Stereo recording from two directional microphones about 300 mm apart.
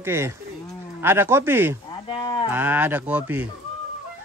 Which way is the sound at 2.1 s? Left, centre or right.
Centre.